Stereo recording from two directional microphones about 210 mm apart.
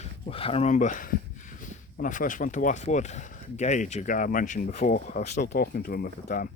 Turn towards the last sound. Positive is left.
turn(degrees=45)  # may be behind; listen again after turning